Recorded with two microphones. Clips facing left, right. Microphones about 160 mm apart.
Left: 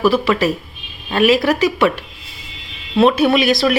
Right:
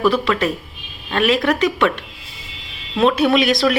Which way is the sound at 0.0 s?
5° left (ahead or behind).